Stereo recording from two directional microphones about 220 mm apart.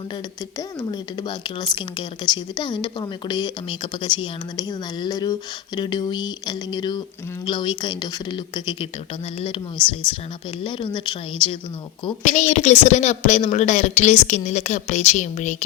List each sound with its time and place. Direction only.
0.8 s speech: 20° left (ahead or behind)
12.2 s a woman's voice: 35° left (ahead or behind)